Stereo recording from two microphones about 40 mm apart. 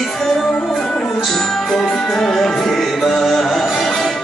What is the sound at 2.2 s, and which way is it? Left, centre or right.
Music, centre.